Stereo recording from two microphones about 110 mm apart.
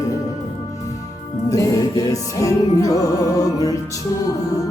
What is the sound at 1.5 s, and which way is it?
Music, 30° left (ahead or behind).